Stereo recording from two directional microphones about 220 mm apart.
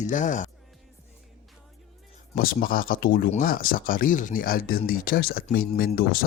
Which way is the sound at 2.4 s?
40° left (ahead or behind).